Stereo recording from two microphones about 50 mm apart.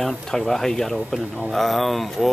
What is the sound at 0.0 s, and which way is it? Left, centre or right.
Speech, centre.